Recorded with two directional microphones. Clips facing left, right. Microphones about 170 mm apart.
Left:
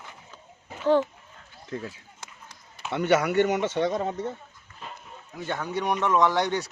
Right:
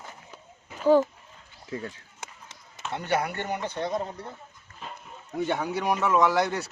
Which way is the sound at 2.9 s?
80° left.